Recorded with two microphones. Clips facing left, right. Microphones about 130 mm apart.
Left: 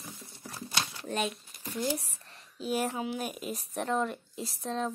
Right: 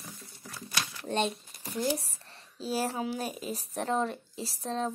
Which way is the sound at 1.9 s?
35° right (ahead or behind).